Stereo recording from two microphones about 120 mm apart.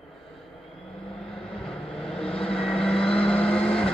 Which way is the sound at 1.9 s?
5° left (ahead or behind).